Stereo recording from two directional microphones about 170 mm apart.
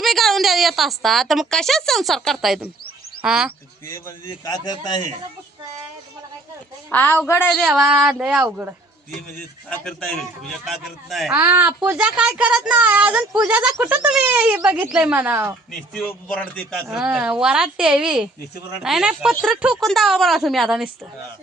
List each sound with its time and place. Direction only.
0.0 s a woman's voice: centre (ahead or behind)
3.8 s a man's voice: 15° left (ahead or behind)
6.9 s a man's voice: 10° left (ahead or behind)
7.5 s speech: centre (ahead or behind)
9.6 s speech: 5° left (ahead or behind)
16.0 s a man's voice: 10° left (ahead or behind)
16.9 s speech: 5° right (ahead or behind)